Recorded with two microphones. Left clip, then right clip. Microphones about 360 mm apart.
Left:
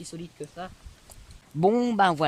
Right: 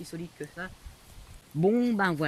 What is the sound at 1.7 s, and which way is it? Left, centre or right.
Speech, centre.